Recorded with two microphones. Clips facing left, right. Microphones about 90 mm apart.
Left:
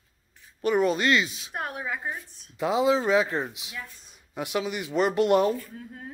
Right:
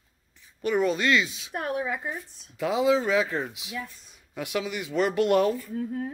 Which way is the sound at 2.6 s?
20° left (ahead or behind).